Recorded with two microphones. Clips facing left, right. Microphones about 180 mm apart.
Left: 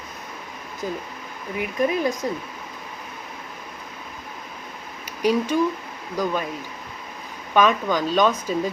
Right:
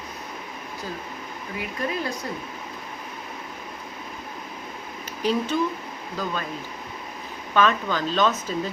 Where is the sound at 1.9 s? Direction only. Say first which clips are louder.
Left 5 dB; 20° left (ahead or behind).